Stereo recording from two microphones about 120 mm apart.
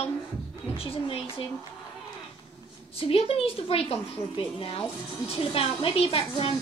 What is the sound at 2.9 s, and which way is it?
A man's voice, 55° left (ahead or behind).